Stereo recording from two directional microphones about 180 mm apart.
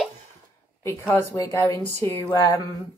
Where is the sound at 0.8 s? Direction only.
10° left (ahead or behind).